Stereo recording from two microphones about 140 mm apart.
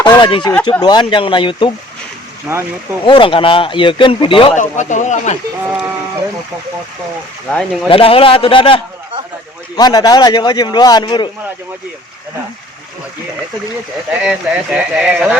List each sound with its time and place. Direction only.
0.0 s a sound: 30° left (ahead or behind)
0.6 s speech: 30° left (ahead or behind)
2.5 s speech: 15° right (ahead or behind)
3.0 s speech: 40° left (ahead or behind)
4.5 s speech: 60° left (ahead or behind)
5.6 s speech: 15° right (ahead or behind)
7.9 s speech: 40° left (ahead or behind)
9.7 s a man's voice: 30° left (ahead or behind)
14.2 s speech: 5° right (ahead or behind)